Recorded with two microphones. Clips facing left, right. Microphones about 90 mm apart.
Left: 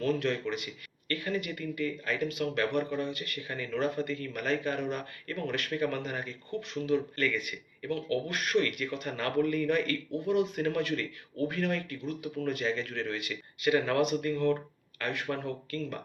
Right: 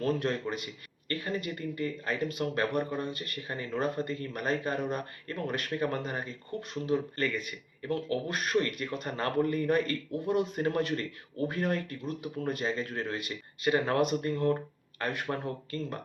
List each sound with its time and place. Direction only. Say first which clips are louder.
0.0 s speech: even; 40° right (ahead or behind)